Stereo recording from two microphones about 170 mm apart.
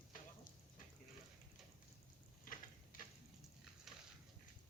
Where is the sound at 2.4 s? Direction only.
55° left (ahead or behind).